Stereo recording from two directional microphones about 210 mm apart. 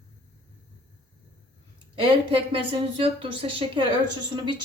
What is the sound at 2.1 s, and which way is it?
A woman's voice, 25° right (ahead or behind).